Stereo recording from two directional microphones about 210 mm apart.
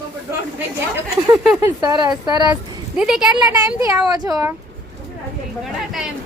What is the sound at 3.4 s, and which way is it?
Speech, 15° right (ahead or behind).